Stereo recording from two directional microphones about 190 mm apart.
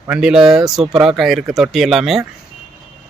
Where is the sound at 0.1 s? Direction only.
5° right (ahead or behind).